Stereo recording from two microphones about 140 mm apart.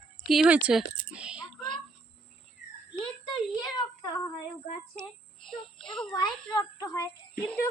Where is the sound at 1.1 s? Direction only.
10° right (ahead or behind).